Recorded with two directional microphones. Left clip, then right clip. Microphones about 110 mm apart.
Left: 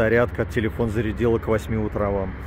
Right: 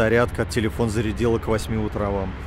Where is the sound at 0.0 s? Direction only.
35° right (ahead or behind).